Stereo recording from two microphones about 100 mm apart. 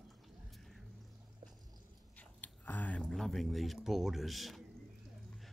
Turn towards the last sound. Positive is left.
turn(degrees=0)  # may be behind; listen again after turning